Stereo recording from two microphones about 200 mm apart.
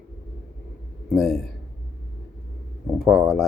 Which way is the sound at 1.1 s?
Centre (ahead or behind).